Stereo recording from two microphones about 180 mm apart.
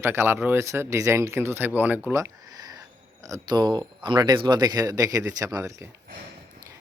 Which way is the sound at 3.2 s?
20° right (ahead or behind).